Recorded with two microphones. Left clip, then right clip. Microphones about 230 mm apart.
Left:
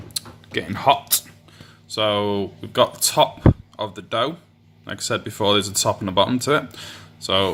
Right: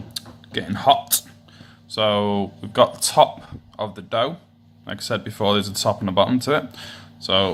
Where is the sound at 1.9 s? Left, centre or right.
Left.